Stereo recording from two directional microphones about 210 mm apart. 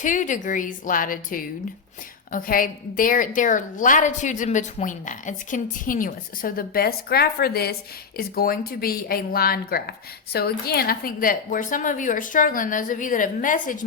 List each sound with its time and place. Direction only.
0.0 s a woman's voice: 40° left (ahead or behind)